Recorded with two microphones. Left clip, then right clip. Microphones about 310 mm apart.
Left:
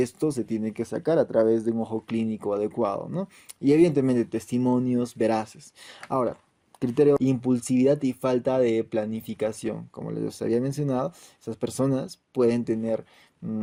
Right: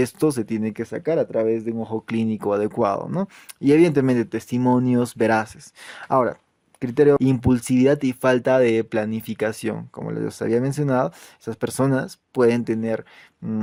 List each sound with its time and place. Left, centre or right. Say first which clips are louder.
0.0 s speech: right 5 dB; right